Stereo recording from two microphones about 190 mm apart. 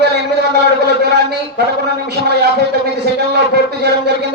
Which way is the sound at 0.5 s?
60° right (ahead or behind).